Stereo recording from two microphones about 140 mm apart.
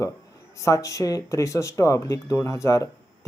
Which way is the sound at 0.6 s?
20° left (ahead or behind).